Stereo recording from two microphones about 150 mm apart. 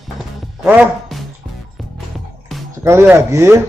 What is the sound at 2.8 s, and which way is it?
Speech, 15° right (ahead or behind).